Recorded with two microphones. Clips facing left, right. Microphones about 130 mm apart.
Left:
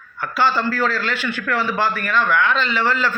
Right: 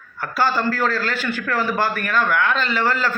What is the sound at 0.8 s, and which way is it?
A man's voice, 45° right (ahead or behind).